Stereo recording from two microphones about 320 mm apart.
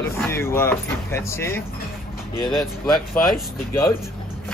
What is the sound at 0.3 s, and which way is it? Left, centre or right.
Speech, centre.